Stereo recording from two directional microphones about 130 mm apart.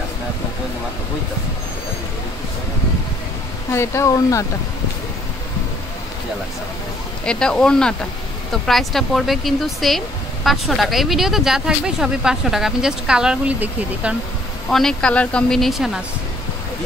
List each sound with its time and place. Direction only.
3.7 s speech: 20° left (ahead or behind)
7.2 s speech: 5° left (ahead or behind); by 14.1 s 10° right (ahead or behind)
14.7 s speech: 5° left (ahead or behind)